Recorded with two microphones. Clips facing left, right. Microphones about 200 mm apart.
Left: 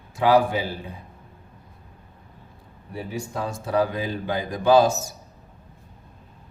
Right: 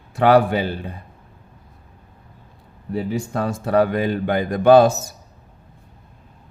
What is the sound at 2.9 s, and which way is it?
A man's voice, 65° right (ahead or behind).